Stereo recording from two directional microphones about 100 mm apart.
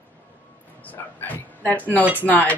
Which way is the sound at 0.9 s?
15° left (ahead or behind).